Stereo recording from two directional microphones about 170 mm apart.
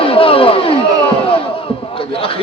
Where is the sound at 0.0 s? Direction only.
30° left (ahead or behind).